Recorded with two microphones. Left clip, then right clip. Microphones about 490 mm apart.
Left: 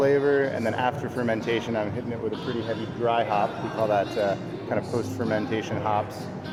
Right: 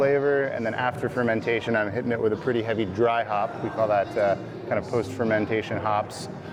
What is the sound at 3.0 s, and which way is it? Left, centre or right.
Speech, right.